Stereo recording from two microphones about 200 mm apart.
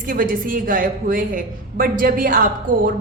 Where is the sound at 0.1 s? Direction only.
45° right (ahead or behind).